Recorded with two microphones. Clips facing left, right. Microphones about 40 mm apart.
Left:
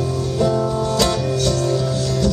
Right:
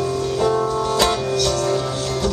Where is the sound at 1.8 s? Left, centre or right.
Right.